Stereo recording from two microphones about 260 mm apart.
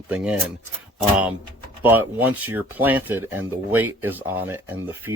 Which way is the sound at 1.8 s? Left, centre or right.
Centre.